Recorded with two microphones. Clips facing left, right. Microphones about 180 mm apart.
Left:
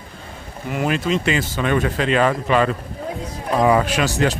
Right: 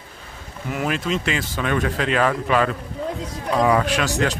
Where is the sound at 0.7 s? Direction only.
Centre (ahead or behind).